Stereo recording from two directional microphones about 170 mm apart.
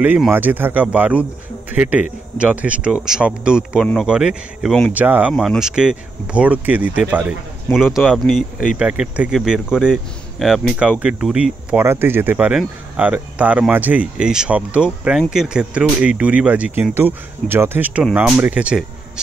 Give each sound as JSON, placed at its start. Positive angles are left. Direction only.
{"t": 0.0, "sound": "speech", "side_deg": -10}
{"t": 4.9, "sound": "speech", "side_deg": -10}
{"t": 5.3, "sound": "speech", "side_deg": 0}